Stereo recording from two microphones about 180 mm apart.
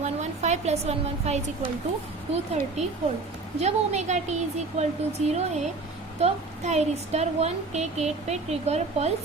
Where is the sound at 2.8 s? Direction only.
40° right (ahead or behind).